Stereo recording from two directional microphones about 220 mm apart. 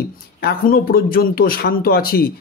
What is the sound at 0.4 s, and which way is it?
Speech, 45° left (ahead or behind).